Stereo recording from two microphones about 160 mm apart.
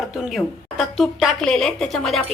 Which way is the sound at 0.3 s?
Centre (ahead or behind).